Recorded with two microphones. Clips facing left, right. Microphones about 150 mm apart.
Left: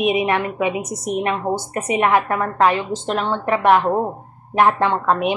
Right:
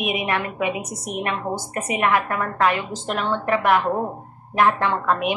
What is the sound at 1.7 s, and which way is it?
A woman's voice, 25° left (ahead or behind).